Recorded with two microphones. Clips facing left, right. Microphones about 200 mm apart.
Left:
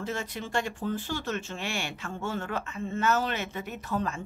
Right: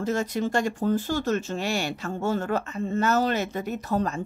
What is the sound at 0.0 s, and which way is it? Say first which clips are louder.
Speech: right 8 dB; 40° right (ahead or behind).